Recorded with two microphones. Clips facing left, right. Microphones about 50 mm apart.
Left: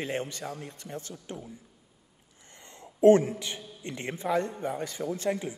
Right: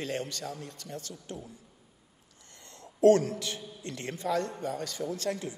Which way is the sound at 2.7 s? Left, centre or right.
Left.